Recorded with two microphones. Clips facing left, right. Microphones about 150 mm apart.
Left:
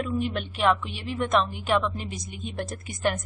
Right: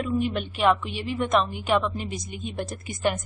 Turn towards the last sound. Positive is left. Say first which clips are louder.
# right 1 dB
turn(degrees=0)  # may be behind; listen again after turning